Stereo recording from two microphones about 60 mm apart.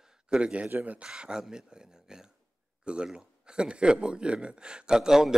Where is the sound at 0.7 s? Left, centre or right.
Right.